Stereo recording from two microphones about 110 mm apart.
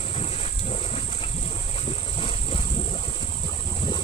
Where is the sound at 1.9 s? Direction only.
60° left (ahead or behind).